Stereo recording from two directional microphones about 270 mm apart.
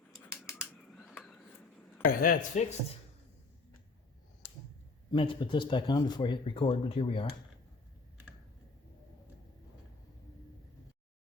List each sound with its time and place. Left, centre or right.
0.4 s a sound: centre
2.0 s speech: left
5.1 s speech: centre